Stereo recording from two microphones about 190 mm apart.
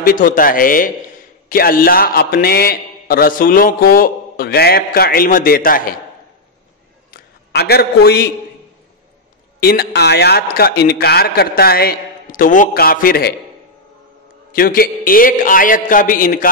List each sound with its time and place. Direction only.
0.0 s a man's voice: 45° left (ahead or behind)
7.1 s a sound: 55° left (ahead or behind)
9.6 s a man's voice: 55° left (ahead or behind)
14.5 s a man's voice: 50° left (ahead or behind)